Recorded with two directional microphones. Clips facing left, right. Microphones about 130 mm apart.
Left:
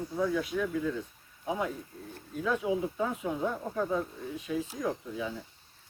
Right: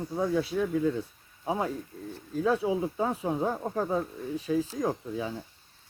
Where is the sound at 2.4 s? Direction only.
30° right (ahead or behind).